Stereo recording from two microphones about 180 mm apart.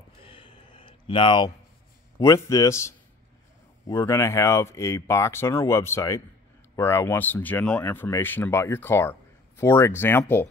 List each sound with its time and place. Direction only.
0.3 s a sound: 30° left (ahead or behind)
2.1 s speech: 20° left (ahead or behind)
3.8 s speech: 15° left (ahead or behind)